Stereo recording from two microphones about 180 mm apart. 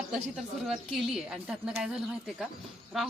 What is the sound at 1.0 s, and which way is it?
Speech, 5° right (ahead or behind).